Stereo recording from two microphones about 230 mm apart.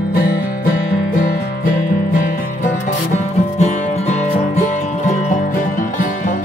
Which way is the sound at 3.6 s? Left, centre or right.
Left.